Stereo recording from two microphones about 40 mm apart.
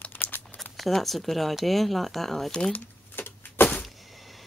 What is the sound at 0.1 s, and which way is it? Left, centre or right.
Crumpling, left.